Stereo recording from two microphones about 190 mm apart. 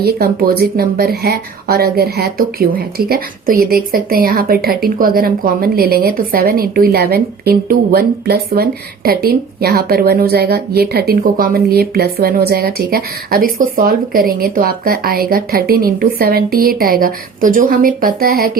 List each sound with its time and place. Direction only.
0.0 s speech: 55° right (ahead or behind)